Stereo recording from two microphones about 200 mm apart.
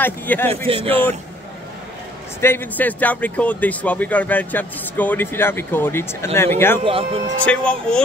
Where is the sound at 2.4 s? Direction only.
10° left (ahead or behind).